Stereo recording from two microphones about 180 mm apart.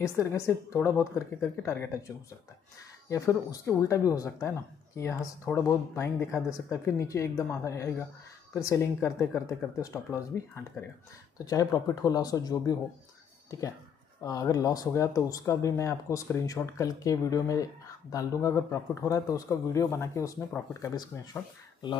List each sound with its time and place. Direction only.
0.0 s speech: 15° left (ahead or behind)
3.1 s speech: 15° left (ahead or behind)
14.2 s speech: 20° left (ahead or behind)